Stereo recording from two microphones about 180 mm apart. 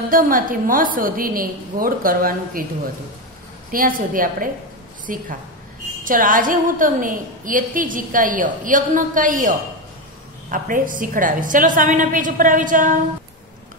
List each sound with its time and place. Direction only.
0.1 s a woman's voice: 50° right (ahead or behind)
3.7 s a woman's voice: 50° right (ahead or behind)